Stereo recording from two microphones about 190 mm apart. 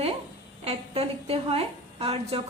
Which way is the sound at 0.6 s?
30° right (ahead or behind).